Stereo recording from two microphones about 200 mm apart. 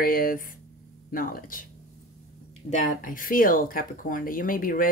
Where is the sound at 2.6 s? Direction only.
45° left (ahead or behind).